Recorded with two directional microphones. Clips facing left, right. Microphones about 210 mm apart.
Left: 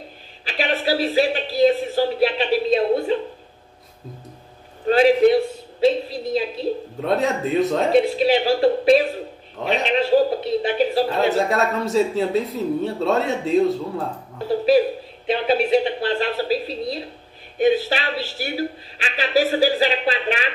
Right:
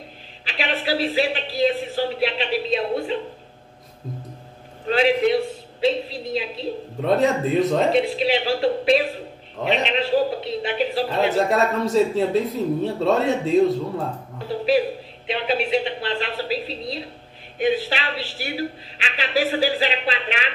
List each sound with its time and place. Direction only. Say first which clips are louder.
0.5 s a man's voice: left 3 dB; 45° left (ahead or behind)
4.8 s a woman's voice: left 4 dB; 45° left (ahead or behind)
7.0 s speech: right 3 dB; centre (ahead or behind)
7.9 s a man's voice: left 3 dB; 45° left (ahead or behind)
11.1 s speech: left 1 dB; centre (ahead or behind)
15.2 s a man's voice: left 4 dB; 40° left (ahead or behind)